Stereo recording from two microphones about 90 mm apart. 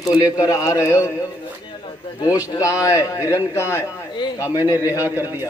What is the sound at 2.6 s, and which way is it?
Speech, 40° left (ahead or behind).